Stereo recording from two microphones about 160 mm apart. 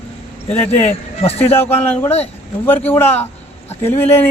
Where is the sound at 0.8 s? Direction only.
45° left (ahead or behind).